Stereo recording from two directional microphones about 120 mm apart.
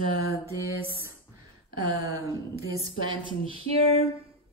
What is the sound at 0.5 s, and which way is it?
Speech, 20° right (ahead or behind).